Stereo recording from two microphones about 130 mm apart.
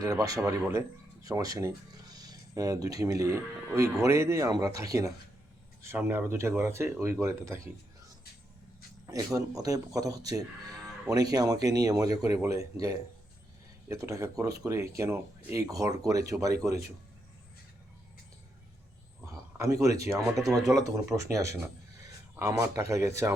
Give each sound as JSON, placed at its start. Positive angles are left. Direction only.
{"t": 0.0, "sound": "speech", "side_deg": -25}
{"t": 9.0, "sound": "speech", "side_deg": -25}
{"t": 10.8, "sound": "moo", "side_deg": -5}
{"t": 11.1, "sound": "speech", "side_deg": -30}
{"t": 19.2, "sound": "speech", "side_deg": -25}